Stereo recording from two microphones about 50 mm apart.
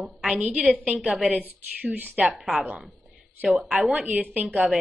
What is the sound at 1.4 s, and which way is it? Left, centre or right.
Speech, right.